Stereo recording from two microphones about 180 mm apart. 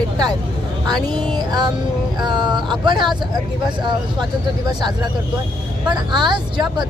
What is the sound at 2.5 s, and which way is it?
Speech, 25° right (ahead or behind).